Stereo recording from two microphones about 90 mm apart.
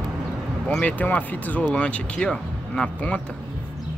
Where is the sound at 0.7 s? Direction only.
15° left (ahead or behind).